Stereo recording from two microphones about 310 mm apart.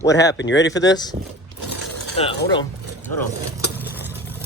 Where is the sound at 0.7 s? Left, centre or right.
Centre.